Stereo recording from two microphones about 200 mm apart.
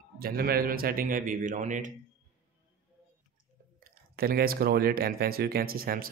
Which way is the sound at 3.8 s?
50° right (ahead or behind).